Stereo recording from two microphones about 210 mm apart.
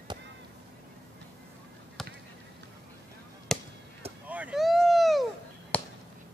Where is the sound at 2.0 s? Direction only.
Centre (ahead or behind).